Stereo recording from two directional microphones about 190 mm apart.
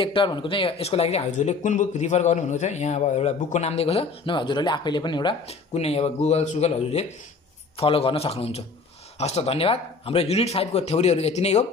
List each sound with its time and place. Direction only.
0.0 s speech: 25° left (ahead or behind)